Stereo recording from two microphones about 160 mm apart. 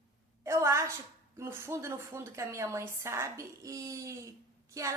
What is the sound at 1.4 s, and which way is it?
Speech, 15° right (ahead or behind).